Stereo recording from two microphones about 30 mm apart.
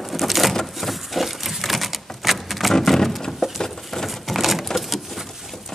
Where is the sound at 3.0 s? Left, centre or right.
Centre.